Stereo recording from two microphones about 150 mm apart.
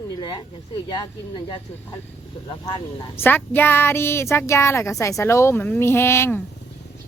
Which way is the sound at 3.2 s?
15° left (ahead or behind).